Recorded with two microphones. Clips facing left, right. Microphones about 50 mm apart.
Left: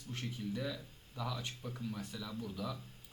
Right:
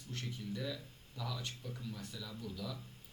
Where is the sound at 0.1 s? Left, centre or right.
Centre.